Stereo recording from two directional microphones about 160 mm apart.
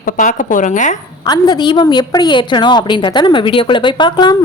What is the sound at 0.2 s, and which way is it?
Speech, 50° left (ahead or behind).